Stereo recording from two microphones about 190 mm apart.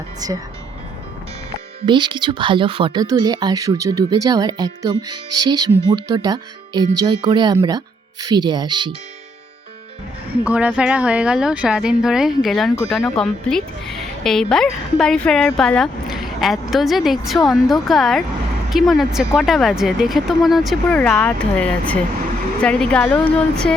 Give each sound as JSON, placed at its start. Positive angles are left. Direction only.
{"t": 0.2, "sound": "speech", "side_deg": -20}
{"t": 1.9, "sound": "speech", "side_deg": -25}
{"t": 10.4, "sound": "speech", "side_deg": -5}